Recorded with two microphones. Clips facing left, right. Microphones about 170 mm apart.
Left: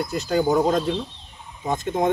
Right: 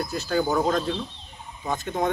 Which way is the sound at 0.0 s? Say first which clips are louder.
Left 3 dB; 20° left (ahead or behind).